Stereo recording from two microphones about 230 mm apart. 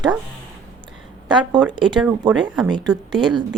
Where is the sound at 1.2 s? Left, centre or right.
Centre.